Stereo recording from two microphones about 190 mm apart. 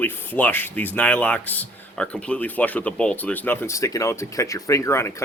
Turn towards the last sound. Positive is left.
turn(degrees=15)  # may be behind; listen again after turning